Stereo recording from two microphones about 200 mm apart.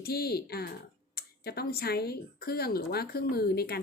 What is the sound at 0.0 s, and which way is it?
Speech, 50° left (ahead or behind).